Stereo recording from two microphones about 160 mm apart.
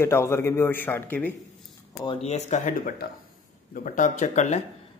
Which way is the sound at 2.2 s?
45° left (ahead or behind).